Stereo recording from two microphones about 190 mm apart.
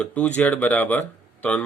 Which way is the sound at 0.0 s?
5° left (ahead or behind).